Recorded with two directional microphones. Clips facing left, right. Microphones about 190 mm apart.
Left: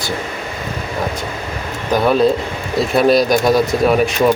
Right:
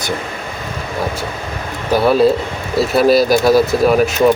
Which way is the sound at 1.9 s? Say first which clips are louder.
Right 2 dB; 5° right (ahead or behind).